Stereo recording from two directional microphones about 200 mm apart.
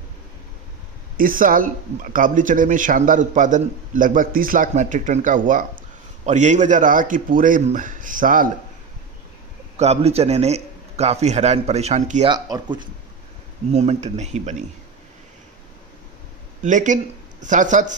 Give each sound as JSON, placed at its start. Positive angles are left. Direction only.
{"t": 1.1, "sound": "speech", "side_deg": -45}
{"t": 9.8, "sound": "speech", "side_deg": -30}
{"t": 12.3, "sound": "speech", "side_deg": -20}
{"t": 13.7, "sound": "speech", "side_deg": -35}
{"t": 16.6, "sound": "speech", "side_deg": -40}